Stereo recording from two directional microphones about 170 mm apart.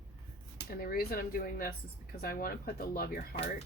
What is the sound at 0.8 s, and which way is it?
Speech, 60° left (ahead or behind).